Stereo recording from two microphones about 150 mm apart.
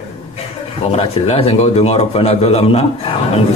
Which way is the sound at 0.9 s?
40° left (ahead or behind).